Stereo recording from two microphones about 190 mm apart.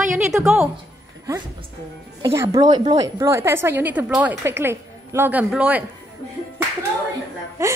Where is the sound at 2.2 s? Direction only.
15° right (ahead or behind).